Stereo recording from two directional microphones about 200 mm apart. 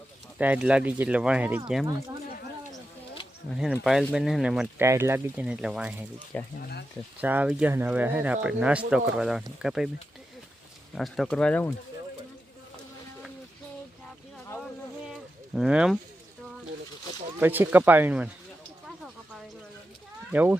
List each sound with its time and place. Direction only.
0.3 s speech: 10° right (ahead or behind)
3.6 s speech: centre (ahead or behind)
4.8 s speech: 15° right (ahead or behind)
6.6 s speech: 55° left (ahead or behind)
7.2 s speech: 10° right (ahead or behind)
10.9 s speech: centre (ahead or behind)
15.1 s a sound: 5° right (ahead or behind)
17.4 s speech: 10° right (ahead or behind)
18.9 s a sound: centre (ahead or behind)
20.3 s speech: 10° right (ahead or behind)